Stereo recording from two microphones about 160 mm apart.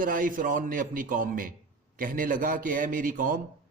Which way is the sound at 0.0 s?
60° right (ahead or behind).